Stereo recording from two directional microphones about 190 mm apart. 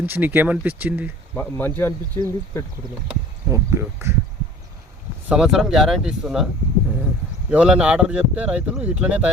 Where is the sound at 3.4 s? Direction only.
15° right (ahead or behind).